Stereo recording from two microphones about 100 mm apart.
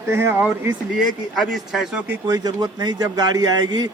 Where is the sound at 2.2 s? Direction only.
40° right (ahead or behind).